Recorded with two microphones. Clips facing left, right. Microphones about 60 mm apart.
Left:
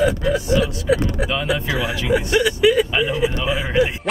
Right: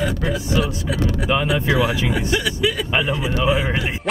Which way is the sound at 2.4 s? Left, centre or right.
Centre.